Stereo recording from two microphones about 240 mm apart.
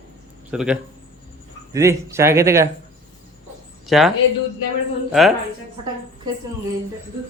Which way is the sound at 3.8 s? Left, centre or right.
Centre.